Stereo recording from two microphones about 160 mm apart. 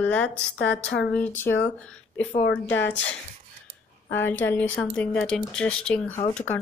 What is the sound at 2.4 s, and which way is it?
Speech, 90° left.